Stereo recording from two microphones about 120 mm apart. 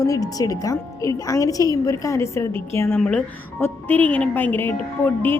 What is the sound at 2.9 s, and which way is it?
Speech, 10° left (ahead or behind).